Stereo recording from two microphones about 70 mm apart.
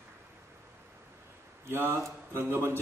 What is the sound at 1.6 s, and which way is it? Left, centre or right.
A man's voice, right.